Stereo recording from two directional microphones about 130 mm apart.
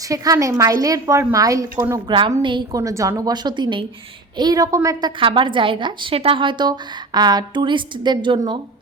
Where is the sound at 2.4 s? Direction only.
40° right (ahead or behind).